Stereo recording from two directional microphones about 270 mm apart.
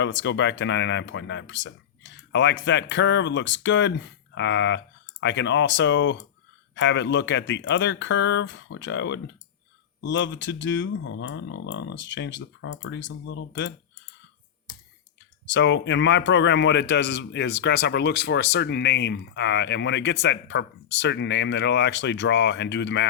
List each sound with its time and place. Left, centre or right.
0.0 s a man's voice: left
15.4 s a man's voice: left